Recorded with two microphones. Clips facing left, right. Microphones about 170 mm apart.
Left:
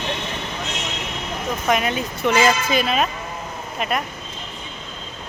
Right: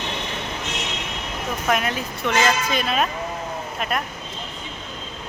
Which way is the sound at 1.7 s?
Centre (ahead or behind).